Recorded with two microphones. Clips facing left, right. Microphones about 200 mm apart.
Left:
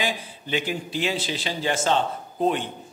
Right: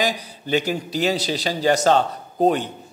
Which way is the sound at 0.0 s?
40° right (ahead or behind).